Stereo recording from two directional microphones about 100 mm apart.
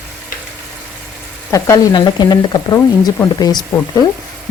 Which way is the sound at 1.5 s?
30° left (ahead or behind).